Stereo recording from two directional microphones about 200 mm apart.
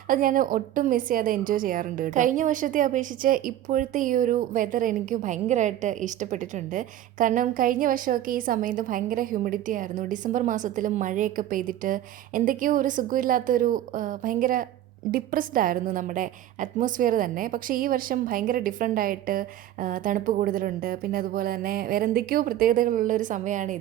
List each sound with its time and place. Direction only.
0.1 s a woman's voice: 45° right (ahead or behind)